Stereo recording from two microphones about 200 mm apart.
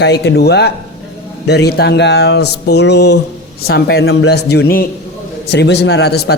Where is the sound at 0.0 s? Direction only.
55° left (ahead or behind).